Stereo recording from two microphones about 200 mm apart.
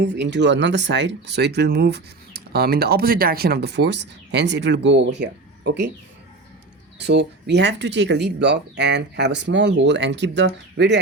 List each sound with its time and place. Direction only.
0.0 s speech: 60° right (ahead or behind)
7.0 s speech: 60° right (ahead or behind)